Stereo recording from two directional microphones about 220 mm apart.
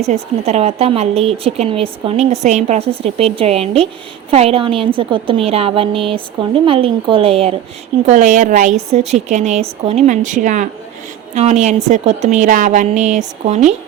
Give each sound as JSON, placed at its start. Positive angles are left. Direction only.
{"t": 0.0, "sound": "a woman's voice", "side_deg": -30}